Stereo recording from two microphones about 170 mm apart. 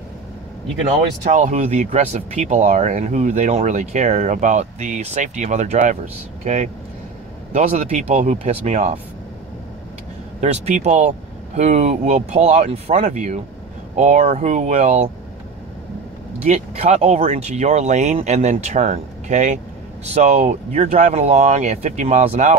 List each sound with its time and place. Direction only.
1.2 s speech: 45° right (ahead or behind)
10.4 s speech: 40° right (ahead or behind)
16.4 s speech: 40° right (ahead or behind)